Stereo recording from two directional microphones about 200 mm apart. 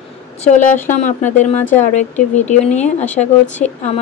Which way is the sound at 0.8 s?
35° left (ahead or behind).